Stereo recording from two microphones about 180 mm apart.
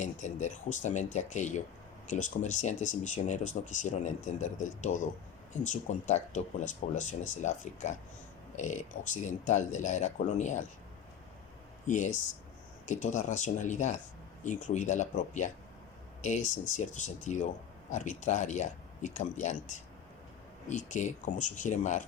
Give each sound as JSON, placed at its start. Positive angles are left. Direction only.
{"t": 0.0, "sound": "speech", "side_deg": 40}
{"t": 11.9, "sound": "speech", "side_deg": 40}